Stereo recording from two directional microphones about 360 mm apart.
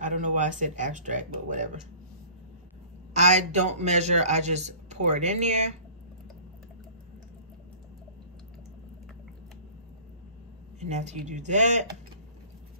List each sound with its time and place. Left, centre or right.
0.0 s speech: right
3.1 s speech: centre
10.8 s speech: centre